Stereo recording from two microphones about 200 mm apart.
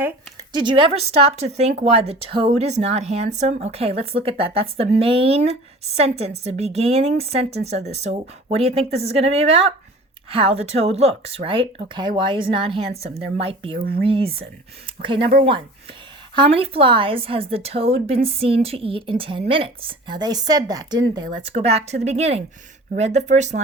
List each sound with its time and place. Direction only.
0.0 s a sound: 20° right (ahead or behind)
1.4 s a woman's voice: 35° right (ahead or behind)
13.7 s speech: 50° right (ahead or behind)
14.1 s a woman's voice: 30° right (ahead or behind)
16.6 s a woman's voice: 25° right (ahead or behind)